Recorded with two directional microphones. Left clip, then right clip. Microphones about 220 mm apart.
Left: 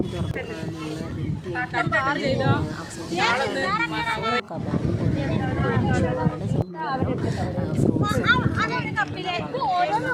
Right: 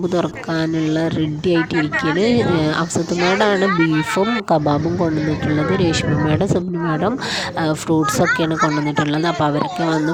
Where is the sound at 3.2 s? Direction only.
50° left (ahead or behind).